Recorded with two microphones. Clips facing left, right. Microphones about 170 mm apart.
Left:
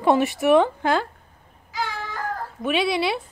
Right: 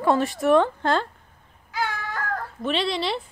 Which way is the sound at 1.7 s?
60° right (ahead or behind).